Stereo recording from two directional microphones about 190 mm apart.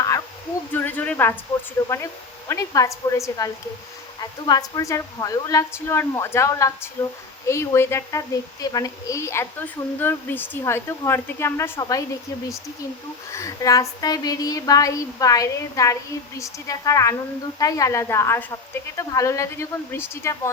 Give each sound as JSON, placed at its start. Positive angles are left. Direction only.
{"t": 0.7, "sound": "a sound", "side_deg": 10}
{"t": 1.8, "sound": "a woman's voice", "side_deg": 15}
{"t": 13.3, "sound": "a woman's voice", "side_deg": 15}